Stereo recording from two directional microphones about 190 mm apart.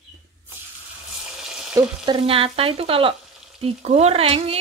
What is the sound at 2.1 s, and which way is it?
Frying, 30° right (ahead or behind).